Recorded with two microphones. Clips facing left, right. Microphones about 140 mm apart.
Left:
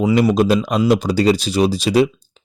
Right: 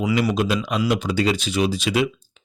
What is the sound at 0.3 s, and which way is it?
A man's voice, 40° left (ahead or behind).